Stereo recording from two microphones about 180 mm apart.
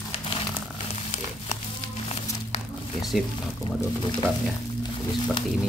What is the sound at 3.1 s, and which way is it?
Speech, centre (ahead or behind).